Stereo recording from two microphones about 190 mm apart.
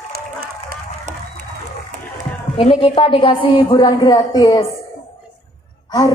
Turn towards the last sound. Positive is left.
turn(degrees=20)  # may be behind; listen again after turning